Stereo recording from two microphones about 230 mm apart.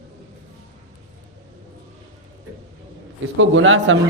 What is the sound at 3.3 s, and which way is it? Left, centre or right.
Speech, right.